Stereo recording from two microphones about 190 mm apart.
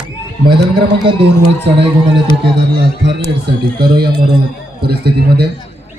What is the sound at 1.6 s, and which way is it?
A man's voice, 65° right (ahead or behind).